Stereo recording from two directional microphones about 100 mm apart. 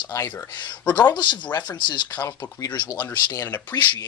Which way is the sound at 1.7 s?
50° left (ahead or behind).